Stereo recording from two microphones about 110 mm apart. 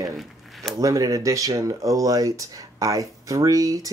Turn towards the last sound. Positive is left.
turn(degrees=-30)  # may be behind; listen again after turning